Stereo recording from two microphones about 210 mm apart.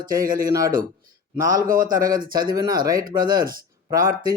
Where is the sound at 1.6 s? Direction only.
40° right (ahead or behind).